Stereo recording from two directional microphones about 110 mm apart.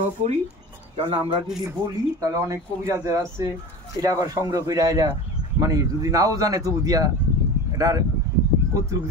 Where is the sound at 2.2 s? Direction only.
30° right (ahead or behind).